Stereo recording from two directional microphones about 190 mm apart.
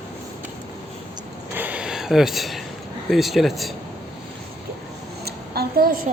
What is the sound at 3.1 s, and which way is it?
Speech, centre (ahead or behind).